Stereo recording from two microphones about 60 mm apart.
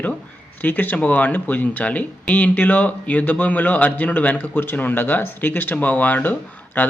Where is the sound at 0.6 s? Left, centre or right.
Left.